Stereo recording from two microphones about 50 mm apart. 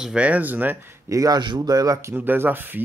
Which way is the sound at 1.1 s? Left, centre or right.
Right.